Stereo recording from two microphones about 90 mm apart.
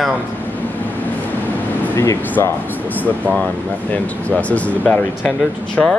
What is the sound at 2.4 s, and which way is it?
Speech, 30° left (ahead or behind).